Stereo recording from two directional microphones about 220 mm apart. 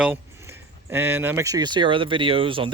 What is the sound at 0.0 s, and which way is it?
Speech, 10° right (ahead or behind).